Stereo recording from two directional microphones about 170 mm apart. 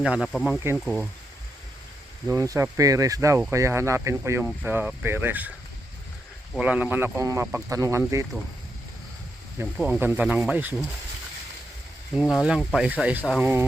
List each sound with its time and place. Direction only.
0.0 s speech: centre (ahead or behind)
0.6 s speech: 15° right (ahead or behind)
2.2 s speech: 20° right (ahead or behind)
6.6 s speech: 10° right (ahead or behind)
9.7 s speech: 5° right (ahead or behind)
12.3 s speech: centre (ahead or behind)